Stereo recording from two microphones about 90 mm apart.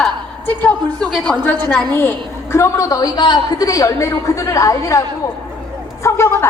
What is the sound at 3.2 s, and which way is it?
A woman's voice, 55° left (ahead or behind).